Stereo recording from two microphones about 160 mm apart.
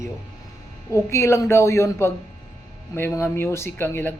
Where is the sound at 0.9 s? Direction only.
15° left (ahead or behind).